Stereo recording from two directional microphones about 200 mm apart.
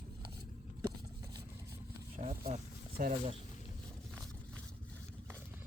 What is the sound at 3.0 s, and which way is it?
Speech, 45° right (ahead or behind).